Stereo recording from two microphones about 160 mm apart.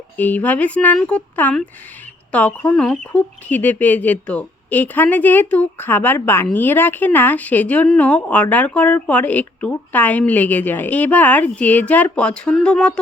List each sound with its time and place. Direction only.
0.2 s speech: 10° left (ahead or behind)